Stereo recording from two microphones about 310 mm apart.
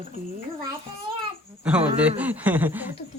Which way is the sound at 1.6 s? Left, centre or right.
Centre.